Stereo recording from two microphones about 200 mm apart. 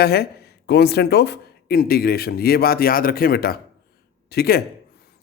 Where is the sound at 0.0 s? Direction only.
55° left (ahead or behind).